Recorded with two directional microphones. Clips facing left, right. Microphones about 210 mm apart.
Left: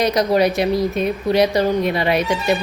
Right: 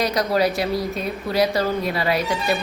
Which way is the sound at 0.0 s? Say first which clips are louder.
Left 4 dB; 20° left (ahead or behind).